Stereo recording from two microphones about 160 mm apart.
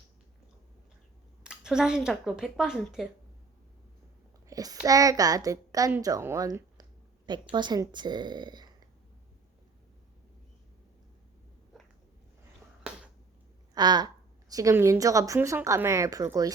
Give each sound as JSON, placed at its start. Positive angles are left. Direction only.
{"t": 1.5, "sound": "speech", "side_deg": -5}
{"t": 4.4, "sound": "a sound", "side_deg": -25}
{"t": 4.9, "sound": "a woman's voice", "side_deg": -20}
{"t": 13.7, "sound": "a woman's voice", "side_deg": -25}